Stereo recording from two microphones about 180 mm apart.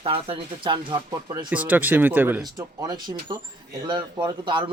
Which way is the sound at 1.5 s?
10° right (ahead or behind).